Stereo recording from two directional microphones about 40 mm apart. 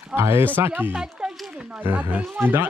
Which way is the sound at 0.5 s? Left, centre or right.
Right.